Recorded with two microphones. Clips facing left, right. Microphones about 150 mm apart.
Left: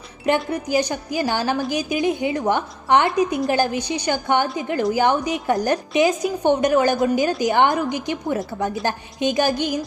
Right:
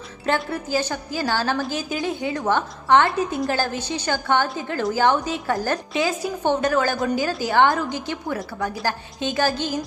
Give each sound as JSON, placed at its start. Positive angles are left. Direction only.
{"t": 0.3, "sound": "a woman's voice", "side_deg": 15}